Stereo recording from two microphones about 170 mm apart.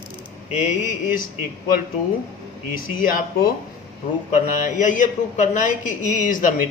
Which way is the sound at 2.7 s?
55° left (ahead or behind).